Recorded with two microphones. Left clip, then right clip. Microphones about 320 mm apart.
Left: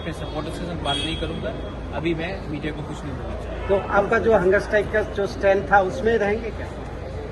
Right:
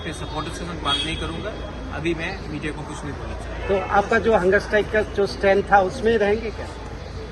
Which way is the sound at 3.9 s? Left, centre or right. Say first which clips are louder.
Even; right.